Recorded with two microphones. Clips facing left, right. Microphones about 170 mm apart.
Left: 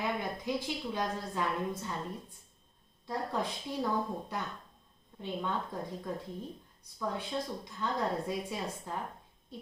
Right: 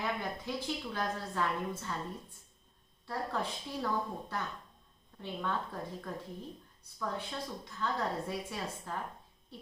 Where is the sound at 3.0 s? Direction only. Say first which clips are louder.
Left 2 dB; 15° left (ahead or behind).